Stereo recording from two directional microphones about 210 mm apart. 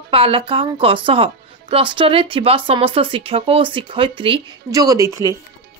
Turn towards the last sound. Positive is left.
turn(degrees=-15)  # may be behind; listen again after turning